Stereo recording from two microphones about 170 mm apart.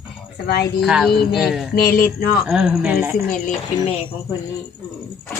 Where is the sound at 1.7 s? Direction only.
60° left (ahead or behind).